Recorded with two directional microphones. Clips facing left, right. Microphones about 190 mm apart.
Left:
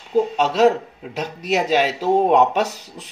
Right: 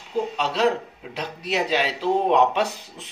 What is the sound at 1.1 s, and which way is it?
Speech, 45° left (ahead or behind).